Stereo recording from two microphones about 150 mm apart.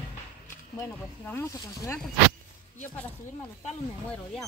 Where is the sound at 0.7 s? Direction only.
15° left (ahead or behind).